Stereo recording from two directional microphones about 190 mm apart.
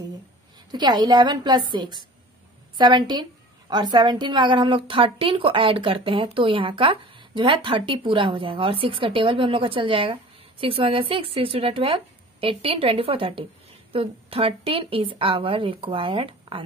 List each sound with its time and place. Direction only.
0.7 s a woman's voice: 20° right (ahead or behind)